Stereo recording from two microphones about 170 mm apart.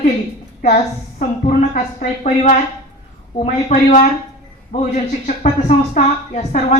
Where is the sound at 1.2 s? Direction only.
50° left (ahead or behind).